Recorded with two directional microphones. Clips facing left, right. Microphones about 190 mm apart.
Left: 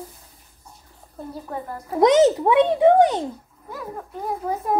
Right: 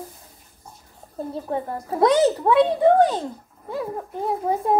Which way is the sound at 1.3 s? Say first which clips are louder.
Right 4 dB; 25° right (ahead or behind).